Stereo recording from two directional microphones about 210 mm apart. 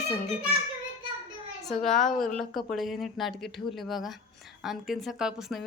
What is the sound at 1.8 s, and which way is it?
A woman's voice, centre (ahead or behind).